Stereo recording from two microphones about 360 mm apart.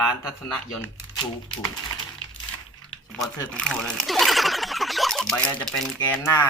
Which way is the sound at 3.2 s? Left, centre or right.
Centre.